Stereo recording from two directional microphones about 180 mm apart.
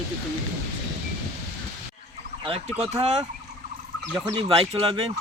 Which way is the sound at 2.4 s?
30° right (ahead or behind).